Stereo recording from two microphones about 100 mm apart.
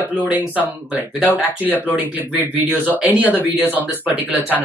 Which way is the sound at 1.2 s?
15° left (ahead or behind).